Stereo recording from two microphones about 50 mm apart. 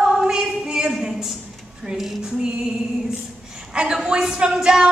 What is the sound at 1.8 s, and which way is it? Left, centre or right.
Speech, centre.